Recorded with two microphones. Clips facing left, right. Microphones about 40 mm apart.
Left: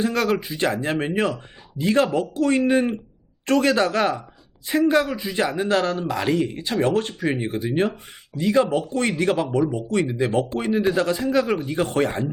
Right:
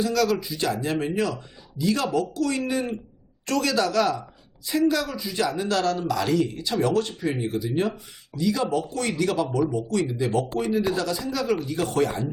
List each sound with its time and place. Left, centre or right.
0.0 s a man's voice: left